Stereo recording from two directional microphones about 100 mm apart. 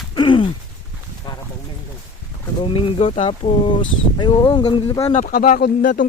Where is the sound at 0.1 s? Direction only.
55° left (ahead or behind).